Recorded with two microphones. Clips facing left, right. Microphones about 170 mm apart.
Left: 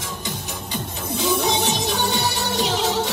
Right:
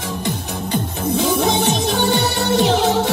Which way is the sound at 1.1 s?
60° right (ahead or behind).